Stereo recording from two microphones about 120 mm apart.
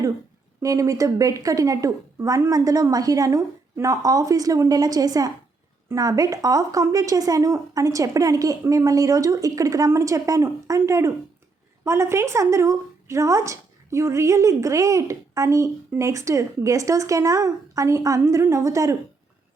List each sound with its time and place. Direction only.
0.6 s a woman's voice: 30° right (ahead or behind)